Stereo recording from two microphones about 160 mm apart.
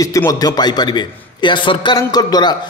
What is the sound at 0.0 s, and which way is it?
Speech, 20° left (ahead or behind).